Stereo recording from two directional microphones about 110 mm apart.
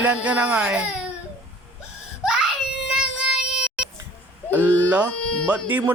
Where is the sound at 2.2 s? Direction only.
5° right (ahead or behind).